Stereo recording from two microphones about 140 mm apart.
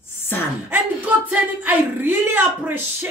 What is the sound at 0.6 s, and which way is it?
Speech, 10° right (ahead or behind).